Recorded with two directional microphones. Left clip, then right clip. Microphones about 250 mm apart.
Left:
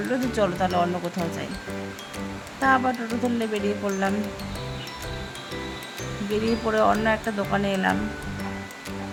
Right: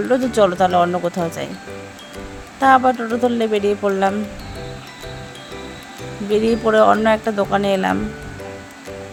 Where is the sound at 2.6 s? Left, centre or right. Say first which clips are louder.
Right 8 dB; right.